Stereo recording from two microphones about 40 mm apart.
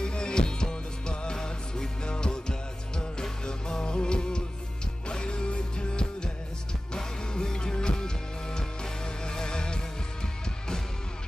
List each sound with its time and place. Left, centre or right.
0.0 s music: left